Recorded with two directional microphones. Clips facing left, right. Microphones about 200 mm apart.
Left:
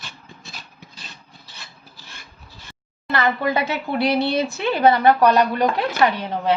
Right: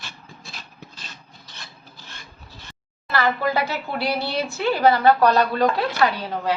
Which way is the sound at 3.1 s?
20° left (ahead or behind).